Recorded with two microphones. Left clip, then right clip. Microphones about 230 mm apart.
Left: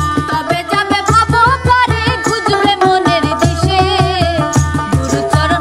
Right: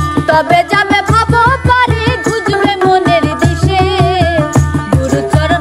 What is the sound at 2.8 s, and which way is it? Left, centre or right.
Music, centre.